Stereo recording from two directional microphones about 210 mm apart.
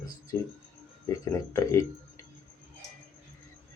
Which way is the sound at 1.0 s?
15° left (ahead or behind).